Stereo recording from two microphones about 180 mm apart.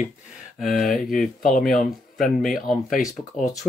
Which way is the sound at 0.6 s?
Centre (ahead or behind).